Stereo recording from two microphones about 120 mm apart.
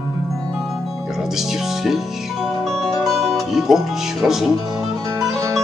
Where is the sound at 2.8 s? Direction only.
Centre (ahead or behind).